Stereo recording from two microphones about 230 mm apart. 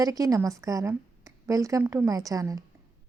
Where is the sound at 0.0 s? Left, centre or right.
Centre.